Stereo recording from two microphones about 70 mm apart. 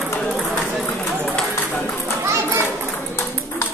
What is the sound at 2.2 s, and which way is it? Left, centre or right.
Children playing, right.